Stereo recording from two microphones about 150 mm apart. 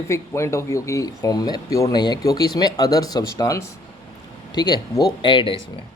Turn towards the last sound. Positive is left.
turn(degrees=35)  # may be behind; listen again after turning